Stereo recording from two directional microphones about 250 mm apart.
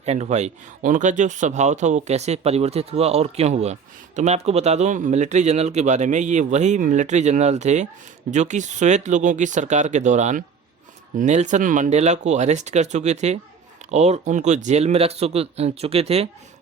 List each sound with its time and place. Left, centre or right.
0.0 s speech: right